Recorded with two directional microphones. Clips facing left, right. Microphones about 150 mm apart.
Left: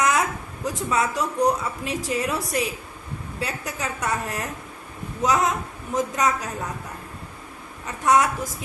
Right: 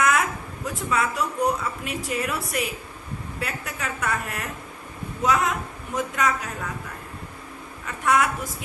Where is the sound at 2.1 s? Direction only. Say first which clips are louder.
Left 2 dB; 30° left (ahead or behind).